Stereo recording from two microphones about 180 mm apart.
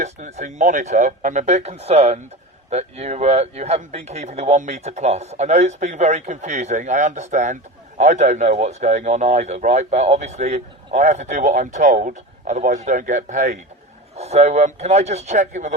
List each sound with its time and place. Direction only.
0.0 s speech: 40° right (ahead or behind)